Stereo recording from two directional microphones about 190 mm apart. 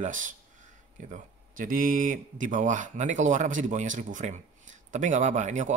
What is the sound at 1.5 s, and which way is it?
Speech, 45° right (ahead or behind).